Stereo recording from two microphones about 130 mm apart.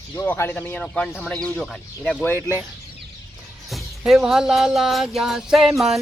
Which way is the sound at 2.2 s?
15° left (ahead or behind).